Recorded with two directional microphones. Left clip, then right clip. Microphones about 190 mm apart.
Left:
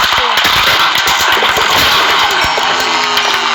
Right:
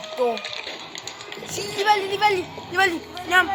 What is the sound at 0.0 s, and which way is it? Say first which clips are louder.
Engine: left 15 dB; 60° left (ahead or behind).